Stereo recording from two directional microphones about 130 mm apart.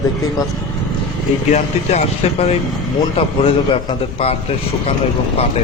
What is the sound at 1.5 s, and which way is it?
A man's voice, 55° left (ahead or behind).